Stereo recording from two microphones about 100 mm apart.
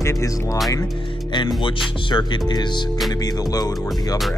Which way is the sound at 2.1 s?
45° left (ahead or behind).